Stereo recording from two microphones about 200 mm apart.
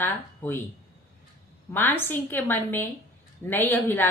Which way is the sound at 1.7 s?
10° left (ahead or behind).